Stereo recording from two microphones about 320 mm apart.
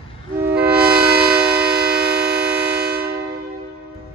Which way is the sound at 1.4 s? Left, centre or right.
Right.